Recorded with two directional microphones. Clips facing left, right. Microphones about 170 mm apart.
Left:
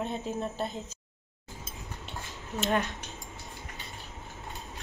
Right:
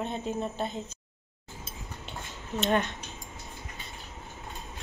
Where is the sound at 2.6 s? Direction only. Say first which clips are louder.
Right 2 dB; centre (ahead or behind).